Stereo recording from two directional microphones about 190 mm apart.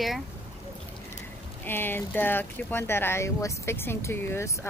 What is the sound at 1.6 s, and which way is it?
Speech, 10° left (ahead or behind).